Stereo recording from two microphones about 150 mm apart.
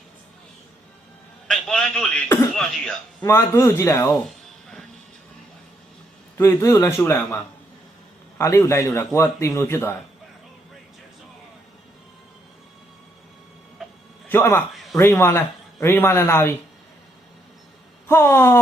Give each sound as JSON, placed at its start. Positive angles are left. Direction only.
{"t": 1.5, "sound": "a man's voice", "side_deg": 5}
{"t": 3.2, "sound": "speech", "side_deg": 20}
{"t": 4.4, "sound": "music", "side_deg": 5}
{"t": 6.3, "sound": "a man's voice", "side_deg": 20}
{"t": 8.4, "sound": "speech", "side_deg": 20}
{"t": 14.3, "sound": "a man's voice", "side_deg": 15}
{"t": 18.1, "sound": "speech", "side_deg": 20}